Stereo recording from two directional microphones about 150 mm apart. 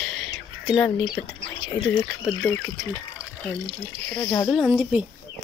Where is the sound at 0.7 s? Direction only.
15° left (ahead or behind).